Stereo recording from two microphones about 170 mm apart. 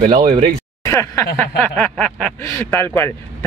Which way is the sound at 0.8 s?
15° left (ahead or behind).